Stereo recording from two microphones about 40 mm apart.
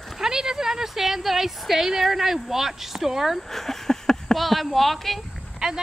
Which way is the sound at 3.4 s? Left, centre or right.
Centre.